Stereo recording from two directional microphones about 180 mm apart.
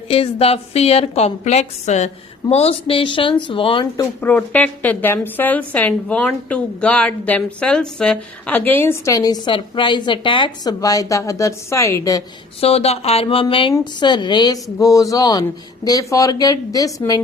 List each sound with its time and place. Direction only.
0.1 s a woman's voice: 35° left (ahead or behind)
4.2 s a woman's voice: 10° left (ahead or behind)
12.5 s a woman's voice: 35° left (ahead or behind)